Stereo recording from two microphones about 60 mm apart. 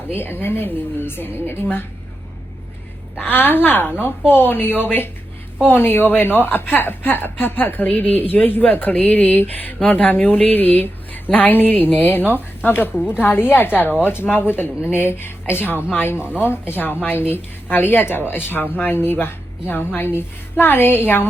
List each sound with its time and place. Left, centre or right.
0.1 s speech: left
3.2 s speech: left
16.1 s speech: right
16.4 s speech: left